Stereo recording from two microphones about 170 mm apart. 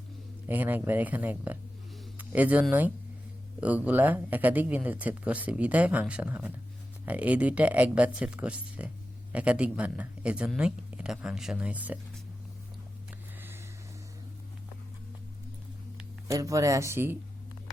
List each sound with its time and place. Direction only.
0.4 s speech: 10° right (ahead or behind)
16.3 s speech: 20° right (ahead or behind)